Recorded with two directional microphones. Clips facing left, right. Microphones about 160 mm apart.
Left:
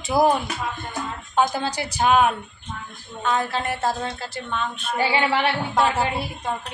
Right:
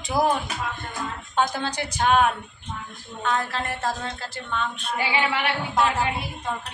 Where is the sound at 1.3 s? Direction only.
10° left (ahead or behind).